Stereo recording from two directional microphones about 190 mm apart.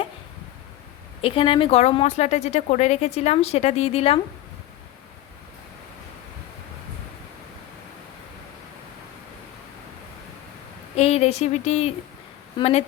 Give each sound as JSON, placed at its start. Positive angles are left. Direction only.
{"t": 1.2, "sound": "speech", "side_deg": 30}
{"t": 10.9, "sound": "speech", "side_deg": 35}